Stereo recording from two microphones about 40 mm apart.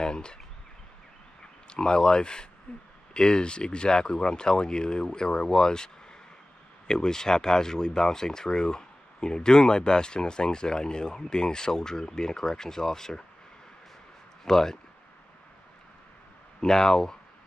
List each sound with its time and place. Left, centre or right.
0.0 s speech: left
1.7 s speech: left
6.9 s speech: centre
14.4 s speech: centre
16.6 s speech: centre